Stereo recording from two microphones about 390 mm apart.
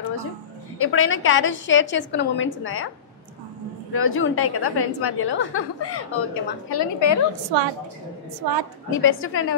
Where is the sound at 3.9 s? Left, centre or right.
Left.